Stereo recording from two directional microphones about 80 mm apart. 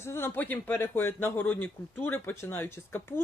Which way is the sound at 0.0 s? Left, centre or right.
Left.